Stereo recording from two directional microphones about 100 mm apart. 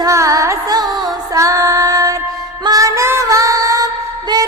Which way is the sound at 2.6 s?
35° right (ahead or behind).